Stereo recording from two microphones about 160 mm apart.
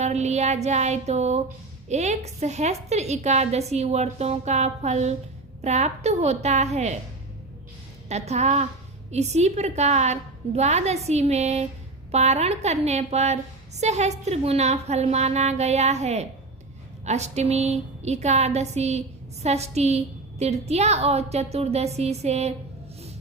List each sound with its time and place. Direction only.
0.0 s a woman's voice: 45° right (ahead or behind)
8.1 s a woman's voice: 45° right (ahead or behind)